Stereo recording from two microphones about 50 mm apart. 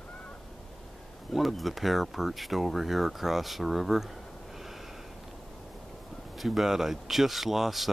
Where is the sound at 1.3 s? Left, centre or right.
Centre.